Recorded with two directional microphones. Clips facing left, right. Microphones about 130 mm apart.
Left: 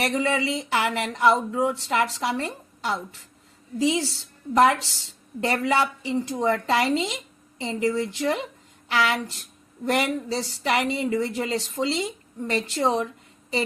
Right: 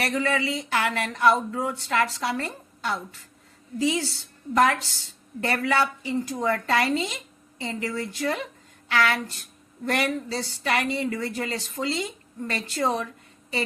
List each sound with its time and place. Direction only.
0.0 s speech: 20° left (ahead or behind)